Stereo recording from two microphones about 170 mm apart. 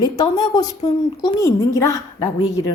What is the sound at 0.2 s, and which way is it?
A woman's voice, 25° left (ahead or behind).